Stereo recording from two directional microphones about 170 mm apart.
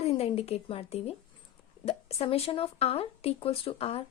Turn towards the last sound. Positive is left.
turn(degrees=35)  # may be behind; listen again after turning